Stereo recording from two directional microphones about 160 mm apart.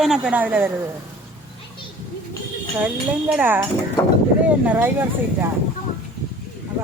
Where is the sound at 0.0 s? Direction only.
5° right (ahead or behind).